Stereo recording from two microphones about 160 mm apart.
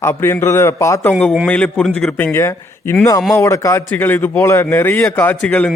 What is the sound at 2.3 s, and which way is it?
A man's voice, 15° left (ahead or behind).